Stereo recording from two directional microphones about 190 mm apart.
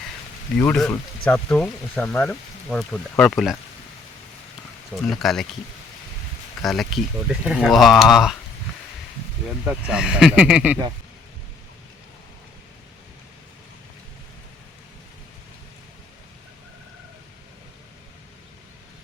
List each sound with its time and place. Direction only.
0.6 s speech: 10° left (ahead or behind)
5.0 s speech: centre (ahead or behind)
6.7 s speech: centre (ahead or behind)
9.6 s speech: 5° right (ahead or behind)